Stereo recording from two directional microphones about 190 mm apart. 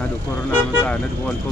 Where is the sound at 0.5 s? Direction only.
5° left (ahead or behind).